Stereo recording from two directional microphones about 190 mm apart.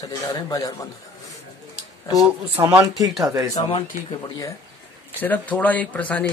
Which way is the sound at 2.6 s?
10° right (ahead or behind).